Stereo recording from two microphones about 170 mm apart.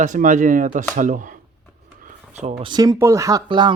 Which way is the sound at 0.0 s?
45° right (ahead or behind).